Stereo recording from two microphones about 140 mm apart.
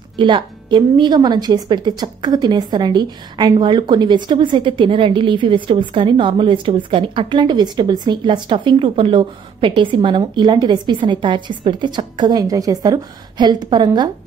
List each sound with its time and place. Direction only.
0.2 s a woman's voice: 35° right (ahead or behind)